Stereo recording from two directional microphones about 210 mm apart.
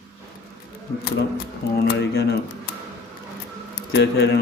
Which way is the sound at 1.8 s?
50° left (ahead or behind).